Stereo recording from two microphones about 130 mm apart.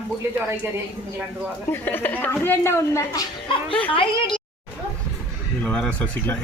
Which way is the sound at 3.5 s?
45° left (ahead or behind).